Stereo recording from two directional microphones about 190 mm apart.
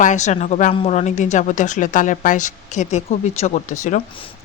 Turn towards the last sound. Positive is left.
turn(degrees=40)  # may be behind; listen again after turning